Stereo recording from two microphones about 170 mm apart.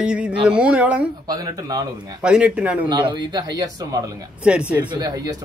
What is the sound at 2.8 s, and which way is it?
Speech, 25° right (ahead or behind).